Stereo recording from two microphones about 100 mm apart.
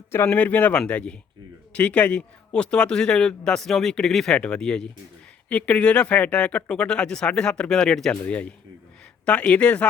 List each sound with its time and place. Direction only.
0.3 s a man's voice: 15° left (ahead or behind)
8.1 s a man's voice: 15° left (ahead or behind)